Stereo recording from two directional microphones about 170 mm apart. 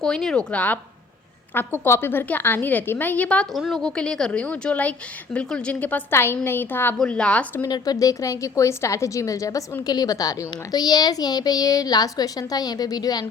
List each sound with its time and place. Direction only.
0.0 s a woman's voice: 5° left (ahead or behind)
7.6 s a woman's voice: 20° left (ahead or behind)